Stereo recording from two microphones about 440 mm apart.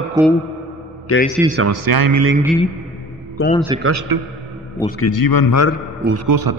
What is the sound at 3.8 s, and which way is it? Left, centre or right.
Speech, right.